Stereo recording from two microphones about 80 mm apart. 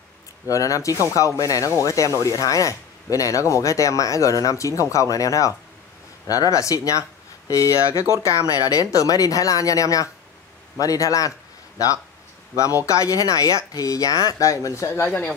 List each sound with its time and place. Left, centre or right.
0.5 s speech: left
12.5 s speech: left